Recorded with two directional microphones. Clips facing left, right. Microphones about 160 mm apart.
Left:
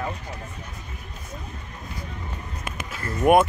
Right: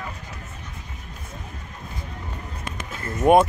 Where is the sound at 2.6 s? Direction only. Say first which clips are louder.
Even; 5° left (ahead or behind).